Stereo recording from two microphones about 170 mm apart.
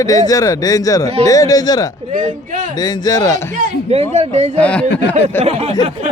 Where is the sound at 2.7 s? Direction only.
25° left (ahead or behind).